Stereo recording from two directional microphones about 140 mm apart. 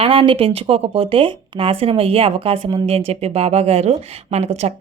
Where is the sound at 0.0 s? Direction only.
40° right (ahead or behind).